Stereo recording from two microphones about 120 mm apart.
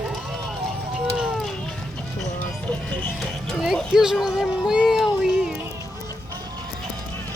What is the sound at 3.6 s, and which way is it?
Speech, 5° right (ahead or behind).